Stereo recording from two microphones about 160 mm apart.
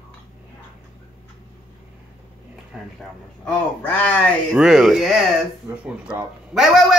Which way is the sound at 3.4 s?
10° left (ahead or behind).